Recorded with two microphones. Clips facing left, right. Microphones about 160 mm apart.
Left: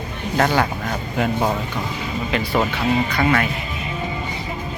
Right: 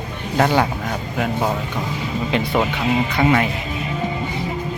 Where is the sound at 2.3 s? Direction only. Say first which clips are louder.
Right 1 dB; 20° right (ahead or behind).